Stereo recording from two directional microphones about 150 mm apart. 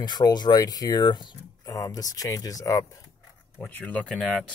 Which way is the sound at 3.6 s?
10° left (ahead or behind).